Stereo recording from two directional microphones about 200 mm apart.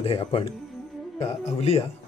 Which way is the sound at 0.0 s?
30° left (ahead or behind).